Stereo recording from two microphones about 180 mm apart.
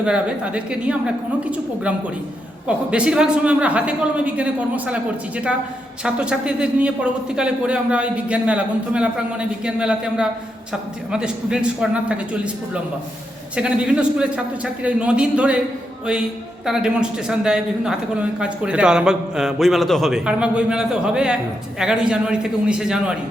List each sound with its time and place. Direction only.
0.0 s speech: 5° right (ahead or behind)
6.0 s speech: 5° right (ahead or behind)
16.6 s speech: 5° right (ahead or behind)